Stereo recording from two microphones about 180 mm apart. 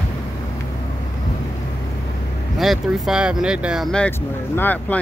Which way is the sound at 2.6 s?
Centre (ahead or behind).